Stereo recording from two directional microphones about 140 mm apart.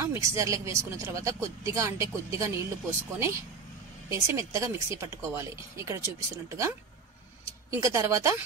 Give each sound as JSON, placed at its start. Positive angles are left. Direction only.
{"t": 0.0, "sound": "speech", "side_deg": -20}
{"t": 7.7, "sound": "speech", "side_deg": -20}